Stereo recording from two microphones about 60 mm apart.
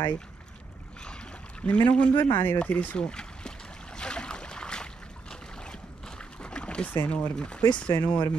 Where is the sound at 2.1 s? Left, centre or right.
Left.